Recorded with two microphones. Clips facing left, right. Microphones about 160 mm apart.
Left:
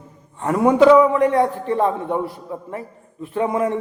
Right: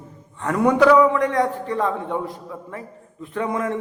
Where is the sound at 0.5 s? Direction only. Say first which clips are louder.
Left 3 dB; 20° left (ahead or behind).